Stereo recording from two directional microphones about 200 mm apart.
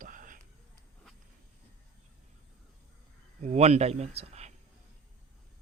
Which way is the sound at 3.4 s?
30° right (ahead or behind).